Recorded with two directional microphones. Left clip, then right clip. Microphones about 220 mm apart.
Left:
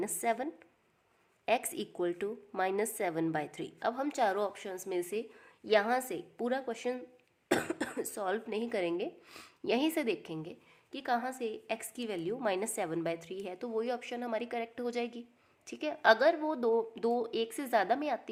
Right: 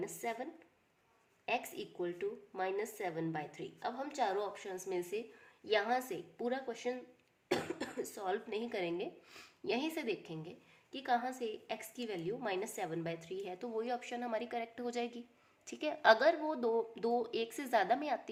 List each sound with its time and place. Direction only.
0.0 s a woman's voice: 45° left (ahead or behind)
1.5 s a woman's voice: 45° left (ahead or behind); by 18.2 s 15° left (ahead or behind)